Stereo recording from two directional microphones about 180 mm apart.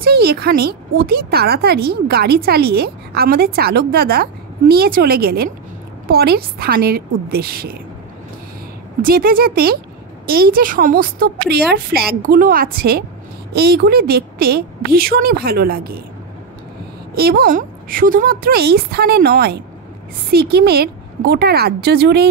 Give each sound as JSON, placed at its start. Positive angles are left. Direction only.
{"t": 0.0, "sound": "speech", "side_deg": -60}
{"t": 9.0, "sound": "a woman's voice", "side_deg": -55}
{"t": 17.1, "sound": "speech", "side_deg": -60}